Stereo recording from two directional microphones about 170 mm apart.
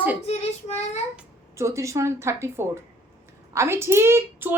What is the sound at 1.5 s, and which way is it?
A woman's voice, 15° right (ahead or behind).